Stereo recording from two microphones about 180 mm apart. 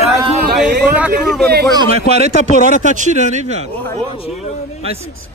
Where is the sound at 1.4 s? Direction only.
65° right (ahead or behind).